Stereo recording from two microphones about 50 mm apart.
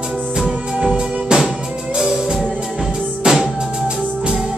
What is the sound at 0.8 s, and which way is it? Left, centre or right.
Music, centre.